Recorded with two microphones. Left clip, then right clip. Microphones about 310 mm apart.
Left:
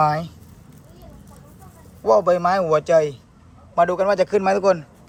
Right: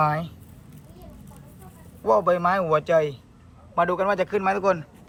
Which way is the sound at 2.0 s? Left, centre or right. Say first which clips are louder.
Left 4 dB; centre.